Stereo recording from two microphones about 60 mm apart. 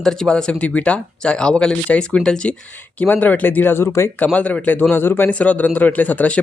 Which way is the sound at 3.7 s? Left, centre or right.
Left.